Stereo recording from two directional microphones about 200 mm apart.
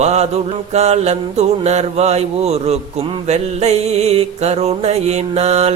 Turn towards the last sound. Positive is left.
turn(degrees=-30)  # may be behind; listen again after turning